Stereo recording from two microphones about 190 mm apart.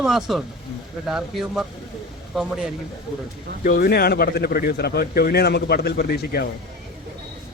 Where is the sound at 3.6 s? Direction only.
50° left (ahead or behind).